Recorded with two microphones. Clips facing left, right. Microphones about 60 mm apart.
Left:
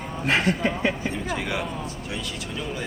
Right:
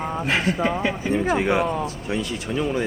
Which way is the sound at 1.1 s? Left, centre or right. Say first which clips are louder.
Right 8 dB; right.